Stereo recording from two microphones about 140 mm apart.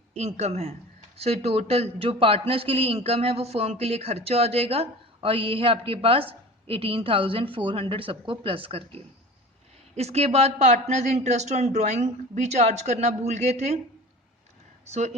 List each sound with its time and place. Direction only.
0.1 s a man's voice: 50° right (ahead or behind)